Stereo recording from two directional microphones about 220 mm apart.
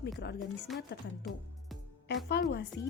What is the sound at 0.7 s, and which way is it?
Speech, centre (ahead or behind).